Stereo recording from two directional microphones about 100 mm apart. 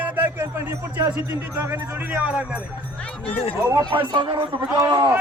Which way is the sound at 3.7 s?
45° right (ahead or behind).